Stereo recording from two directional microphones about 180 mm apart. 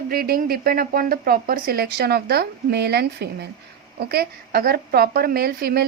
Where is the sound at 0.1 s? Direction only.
55° right (ahead or behind).